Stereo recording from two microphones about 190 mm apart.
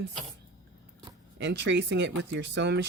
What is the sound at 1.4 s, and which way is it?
Speech, 70° right (ahead or behind).